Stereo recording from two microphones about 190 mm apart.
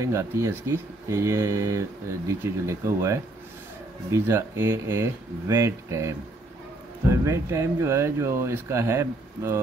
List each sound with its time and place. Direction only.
0.0 s speech: 15° right (ahead or behind)